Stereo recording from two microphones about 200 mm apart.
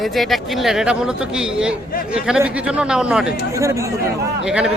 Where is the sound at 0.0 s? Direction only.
Centre (ahead or behind).